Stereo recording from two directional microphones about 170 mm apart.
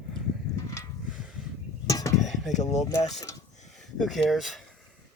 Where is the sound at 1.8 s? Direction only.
20° left (ahead or behind).